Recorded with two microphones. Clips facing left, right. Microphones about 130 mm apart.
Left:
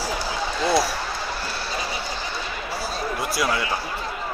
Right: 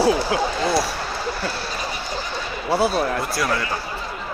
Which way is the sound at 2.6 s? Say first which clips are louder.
Right 12 dB; 65° right (ahead or behind).